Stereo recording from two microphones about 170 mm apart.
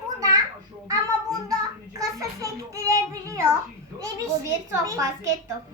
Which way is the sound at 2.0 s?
20° right (ahead or behind).